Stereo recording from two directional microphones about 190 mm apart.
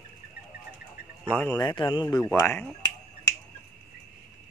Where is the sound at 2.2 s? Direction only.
10° left (ahead or behind).